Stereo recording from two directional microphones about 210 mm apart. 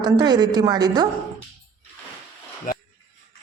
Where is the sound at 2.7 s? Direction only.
40° left (ahead or behind).